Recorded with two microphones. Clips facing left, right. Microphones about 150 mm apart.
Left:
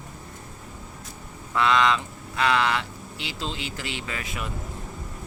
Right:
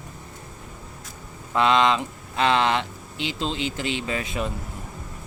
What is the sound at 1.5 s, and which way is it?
Speech, 20° right (ahead or behind).